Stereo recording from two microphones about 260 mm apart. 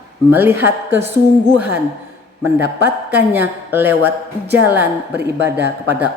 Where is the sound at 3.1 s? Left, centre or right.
Centre.